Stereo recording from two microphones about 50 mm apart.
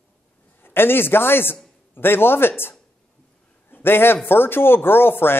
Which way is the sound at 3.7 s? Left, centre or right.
Left.